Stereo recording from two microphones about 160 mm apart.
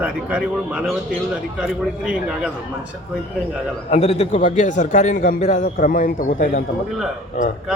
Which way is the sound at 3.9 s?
40° left (ahead or behind).